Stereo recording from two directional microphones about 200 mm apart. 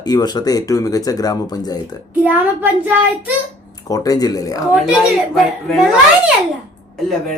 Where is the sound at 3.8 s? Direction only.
20° left (ahead or behind).